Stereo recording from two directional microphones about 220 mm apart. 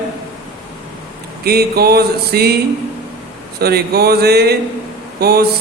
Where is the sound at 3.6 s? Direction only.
45° right (ahead or behind).